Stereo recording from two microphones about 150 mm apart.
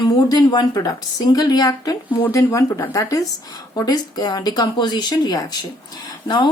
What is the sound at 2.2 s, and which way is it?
A woman's voice, 20° left (ahead or behind).